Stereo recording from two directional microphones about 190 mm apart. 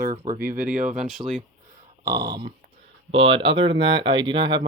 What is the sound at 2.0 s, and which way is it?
Speech, 20° right (ahead or behind).